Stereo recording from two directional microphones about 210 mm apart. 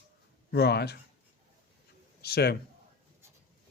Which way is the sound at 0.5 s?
50° left (ahead or behind).